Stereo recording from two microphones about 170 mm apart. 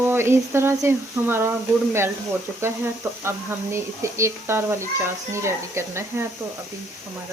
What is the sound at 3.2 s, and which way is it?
A child's voice, 15° right (ahead or behind).